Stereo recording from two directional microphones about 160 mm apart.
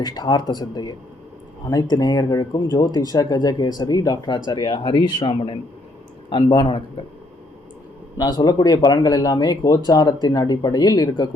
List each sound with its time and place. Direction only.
0.0 s speech: 25° left (ahead or behind)
8.2 s speech: 25° left (ahead or behind)